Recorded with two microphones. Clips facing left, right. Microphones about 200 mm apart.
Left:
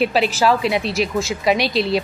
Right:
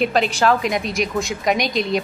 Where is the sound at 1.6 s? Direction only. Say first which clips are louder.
Left 2 dB; 30° left (ahead or behind).